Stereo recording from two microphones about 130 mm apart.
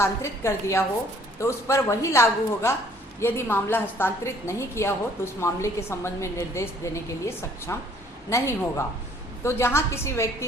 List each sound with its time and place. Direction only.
0.0 s a woman's voice: 20° left (ahead or behind)